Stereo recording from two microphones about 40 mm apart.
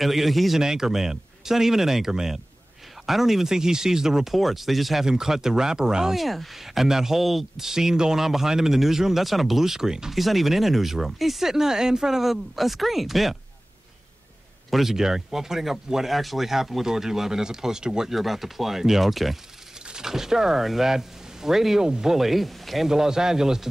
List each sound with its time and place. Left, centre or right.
0.0 s speech: centre
0.6 s speech: centre
4.3 s speech: centre
5.0 s speech: centre
6.1 s speech: centre
10.1 s speech: centre
14.7 s speech: centre
18.1 s speech: centre
22.1 s speech: centre
22.8 s speech: centre